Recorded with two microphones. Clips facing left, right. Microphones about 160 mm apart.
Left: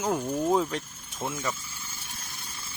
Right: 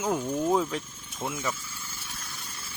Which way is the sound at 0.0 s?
5° right (ahead or behind).